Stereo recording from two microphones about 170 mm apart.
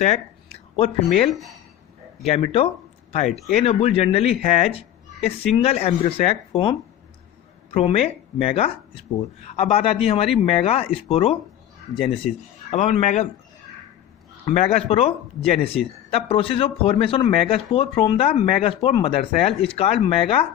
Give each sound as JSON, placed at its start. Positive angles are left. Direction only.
{"t": 0.0, "sound": "speech", "side_deg": 40}
{"t": 12.7, "sound": "speech", "side_deg": 40}
{"t": 14.4, "sound": "speech", "side_deg": 40}